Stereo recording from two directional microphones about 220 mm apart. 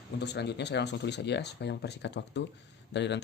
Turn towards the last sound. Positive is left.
turn(degrees=50)  # may be behind; listen again after turning